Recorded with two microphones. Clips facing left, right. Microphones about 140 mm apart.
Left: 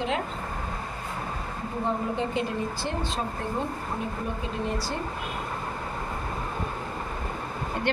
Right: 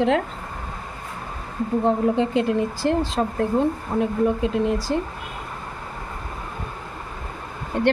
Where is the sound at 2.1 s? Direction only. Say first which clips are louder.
Right 8 dB; 90° right.